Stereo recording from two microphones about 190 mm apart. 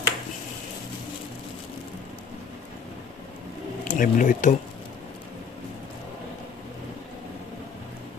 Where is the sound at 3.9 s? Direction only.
45° left (ahead or behind).